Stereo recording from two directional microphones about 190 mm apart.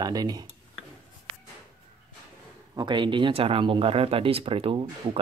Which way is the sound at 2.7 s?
25° right (ahead or behind).